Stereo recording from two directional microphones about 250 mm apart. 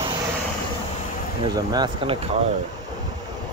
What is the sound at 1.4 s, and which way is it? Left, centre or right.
Speech, centre.